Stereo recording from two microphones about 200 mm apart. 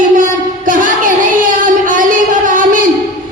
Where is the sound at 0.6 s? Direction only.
40° right (ahead or behind).